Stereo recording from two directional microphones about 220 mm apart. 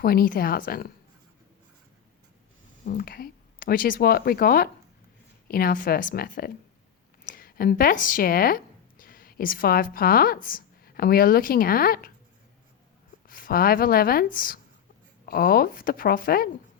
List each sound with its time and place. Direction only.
0.0 s a woman's voice: 40° left (ahead or behind)
2.8 s a woman's voice: 40° left (ahead or behind)
13.2 s a woman's voice: 40° left (ahead or behind)